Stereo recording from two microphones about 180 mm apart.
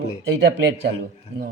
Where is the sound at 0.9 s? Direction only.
65° right (ahead or behind).